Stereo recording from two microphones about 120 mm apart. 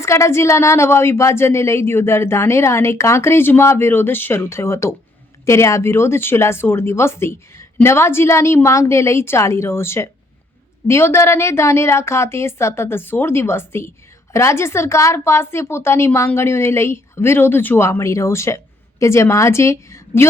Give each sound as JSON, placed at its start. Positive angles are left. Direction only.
{"t": 0.0, "sound": "a woman's voice", "side_deg": 25}